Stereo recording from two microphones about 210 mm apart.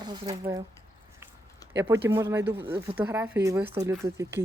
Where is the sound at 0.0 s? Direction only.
20° right (ahead or behind).